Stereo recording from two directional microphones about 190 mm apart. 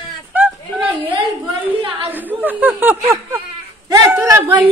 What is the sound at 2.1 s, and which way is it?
Chuckle, 10° right (ahead or behind).